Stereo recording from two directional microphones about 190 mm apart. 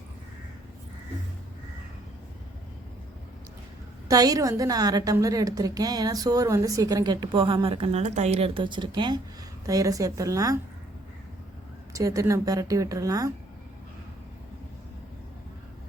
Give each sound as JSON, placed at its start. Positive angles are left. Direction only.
{"t": 4.1, "sound": "a woman's voice", "side_deg": -20}
{"t": 11.9, "sound": "a woman's voice", "side_deg": -15}